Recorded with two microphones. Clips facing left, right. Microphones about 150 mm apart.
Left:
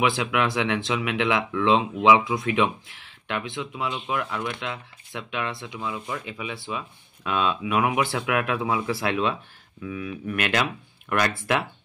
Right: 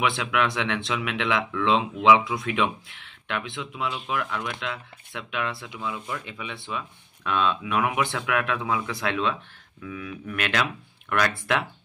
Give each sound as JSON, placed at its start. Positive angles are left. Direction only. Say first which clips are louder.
{"t": 0.0, "sound": "speech", "louder": "left 2 dB", "side_deg": 0}